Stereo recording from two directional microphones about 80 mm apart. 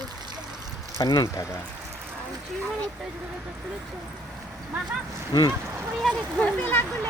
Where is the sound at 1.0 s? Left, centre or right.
Left.